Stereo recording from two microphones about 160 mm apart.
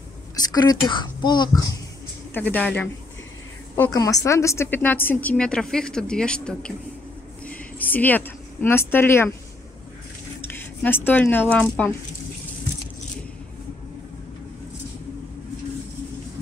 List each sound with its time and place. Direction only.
0.4 s speech: 25° left (ahead or behind)
2.3 s a woman's voice: 10° left (ahead or behind)
3.9 s a woman's voice: 20° left (ahead or behind)
10.4 s speech: 15° left (ahead or behind)